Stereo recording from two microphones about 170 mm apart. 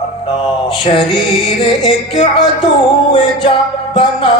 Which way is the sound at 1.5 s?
35° left (ahead or behind).